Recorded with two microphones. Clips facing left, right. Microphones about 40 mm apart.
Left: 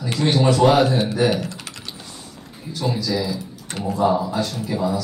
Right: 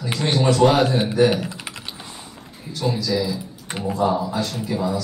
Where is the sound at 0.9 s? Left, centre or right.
Centre.